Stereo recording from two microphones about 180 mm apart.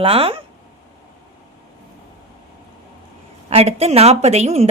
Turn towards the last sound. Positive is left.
turn(degrees=-35)  # may be behind; listen again after turning